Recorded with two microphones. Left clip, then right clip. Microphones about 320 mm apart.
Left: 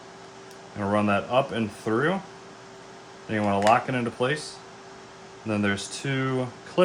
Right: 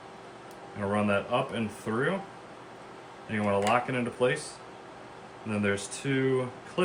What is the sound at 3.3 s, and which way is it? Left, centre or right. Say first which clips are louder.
Speech: left 5 dB; left.